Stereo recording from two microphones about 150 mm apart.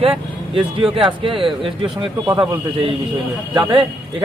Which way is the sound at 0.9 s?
35° right (ahead or behind).